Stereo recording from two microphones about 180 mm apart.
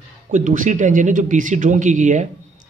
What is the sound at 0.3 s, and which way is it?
Speech, 45° right (ahead or behind).